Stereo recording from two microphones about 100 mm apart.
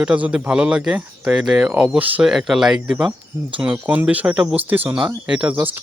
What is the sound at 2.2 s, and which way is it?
Speech, 5° right (ahead or behind).